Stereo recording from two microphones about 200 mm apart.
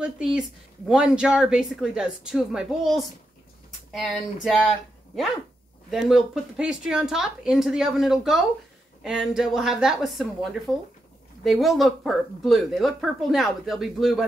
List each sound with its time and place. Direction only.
0.0 s a woman's voice: 5° right (ahead or behind)
5.9 s a woman's voice: centre (ahead or behind)